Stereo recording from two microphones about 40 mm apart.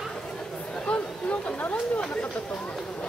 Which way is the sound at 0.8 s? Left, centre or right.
Left.